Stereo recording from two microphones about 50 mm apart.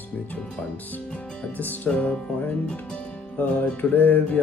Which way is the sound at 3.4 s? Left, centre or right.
Left.